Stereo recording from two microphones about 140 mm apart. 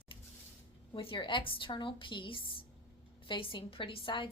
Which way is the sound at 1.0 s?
35° left (ahead or behind).